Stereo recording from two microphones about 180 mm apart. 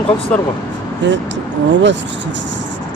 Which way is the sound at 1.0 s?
85° right.